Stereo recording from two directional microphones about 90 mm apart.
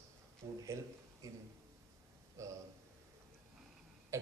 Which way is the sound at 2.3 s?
35° right (ahead or behind).